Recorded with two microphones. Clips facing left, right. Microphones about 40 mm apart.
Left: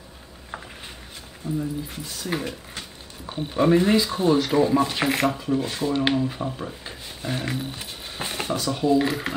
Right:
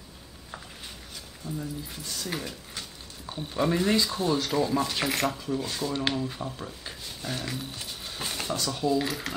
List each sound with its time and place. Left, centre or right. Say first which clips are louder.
1.6 s speech: left 7 dB; centre